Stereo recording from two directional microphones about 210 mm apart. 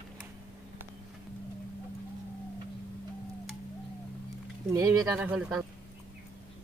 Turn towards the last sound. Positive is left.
turn(degrees=-5)  # may be behind; listen again after turning